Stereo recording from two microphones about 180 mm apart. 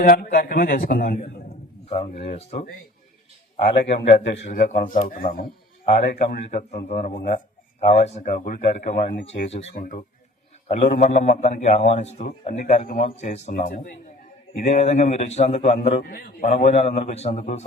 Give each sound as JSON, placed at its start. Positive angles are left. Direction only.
{"t": 0.0, "sound": "speech", "side_deg": 50}
{"t": 1.9, "sound": "a man's voice", "side_deg": 40}
{"t": 3.6, "sound": "a man's voice", "side_deg": 70}
{"t": 4.4, "sound": "speech", "side_deg": 45}
{"t": 9.7, "sound": "a man's voice", "side_deg": 50}